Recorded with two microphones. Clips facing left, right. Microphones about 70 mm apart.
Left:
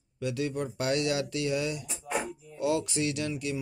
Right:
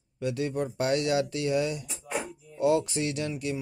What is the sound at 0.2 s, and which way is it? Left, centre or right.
Speech, right.